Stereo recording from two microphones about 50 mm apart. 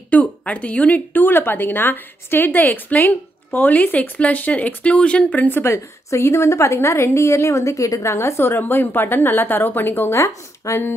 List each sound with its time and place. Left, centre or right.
0.1 s speech: left
5.5 s a woman's voice: left
6.0 s a woman's voice: left
10.1 s speech: left